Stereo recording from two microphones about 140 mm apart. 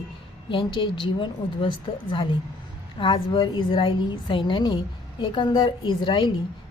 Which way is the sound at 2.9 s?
35° left (ahead or behind).